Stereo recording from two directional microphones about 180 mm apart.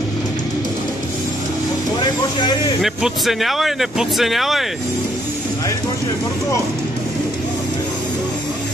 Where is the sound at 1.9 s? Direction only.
25° left (ahead or behind).